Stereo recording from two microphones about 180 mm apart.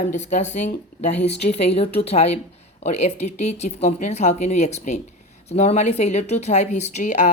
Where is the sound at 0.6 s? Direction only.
40° left (ahead or behind).